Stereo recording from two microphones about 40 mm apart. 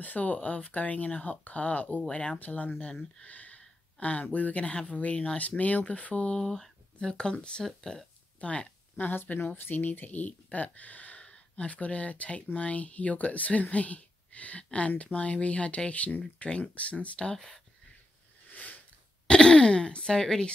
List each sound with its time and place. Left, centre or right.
0.0 s speech: left
6.4 s speech: centre
8.4 s a sound: left
9.0 s speech: left
11.2 s speech: left
16.4 s speech: centre
16.7 s speech: left
18.5 s a sound: left
19.2 s speech: left